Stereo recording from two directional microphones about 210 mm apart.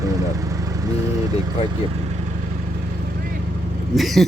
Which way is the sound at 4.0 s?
Centre (ahead or behind).